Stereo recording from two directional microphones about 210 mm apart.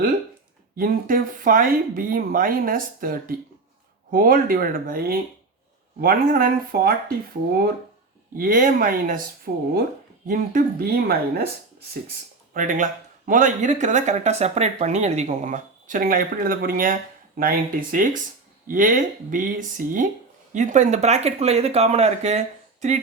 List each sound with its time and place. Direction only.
0.8 s speech: 40° right (ahead or behind)
8.4 s speech: 40° right (ahead or behind)
12.5 s speech: 40° right (ahead or behind)